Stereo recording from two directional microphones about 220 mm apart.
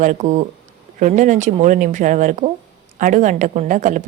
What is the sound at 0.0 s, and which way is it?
A woman's voice, 35° right (ahead or behind).